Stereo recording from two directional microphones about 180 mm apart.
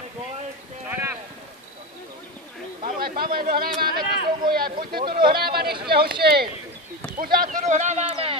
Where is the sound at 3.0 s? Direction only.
55° right (ahead or behind).